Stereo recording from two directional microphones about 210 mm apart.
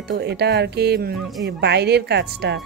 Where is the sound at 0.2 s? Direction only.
50° right (ahead or behind).